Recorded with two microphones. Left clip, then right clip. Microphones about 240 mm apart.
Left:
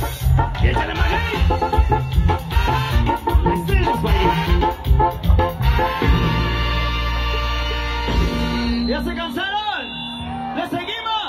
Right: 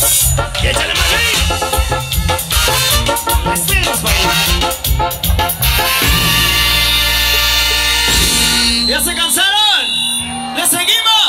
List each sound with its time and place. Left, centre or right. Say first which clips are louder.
0.4 s music: right 2 dB; right
5.8 s music: right 7 dB; right
10.9 s music: right 12 dB; right